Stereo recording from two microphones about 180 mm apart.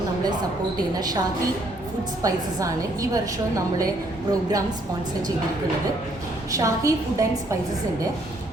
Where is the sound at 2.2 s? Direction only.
20° right (ahead or behind).